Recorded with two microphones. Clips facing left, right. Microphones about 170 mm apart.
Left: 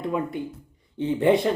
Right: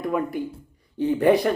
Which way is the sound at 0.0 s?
25° left (ahead or behind).